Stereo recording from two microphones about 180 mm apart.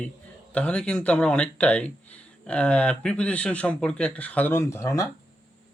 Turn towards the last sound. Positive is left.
turn(degrees=15)  # may be behind; listen again after turning